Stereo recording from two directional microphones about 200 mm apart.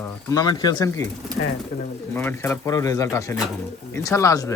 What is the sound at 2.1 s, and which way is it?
Speech, 10° left (ahead or behind).